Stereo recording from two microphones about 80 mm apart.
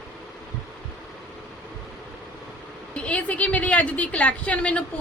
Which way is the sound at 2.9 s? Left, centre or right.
Centre.